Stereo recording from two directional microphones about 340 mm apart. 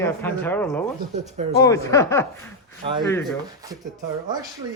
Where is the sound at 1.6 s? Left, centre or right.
Centre.